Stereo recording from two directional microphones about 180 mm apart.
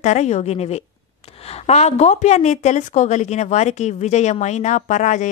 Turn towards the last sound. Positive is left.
turn(degrees=40)  # may be behind; listen again after turning